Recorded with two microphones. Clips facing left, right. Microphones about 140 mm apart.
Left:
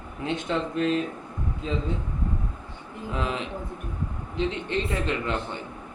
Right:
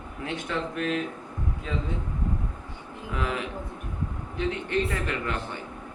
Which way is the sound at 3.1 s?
25° left (ahead or behind).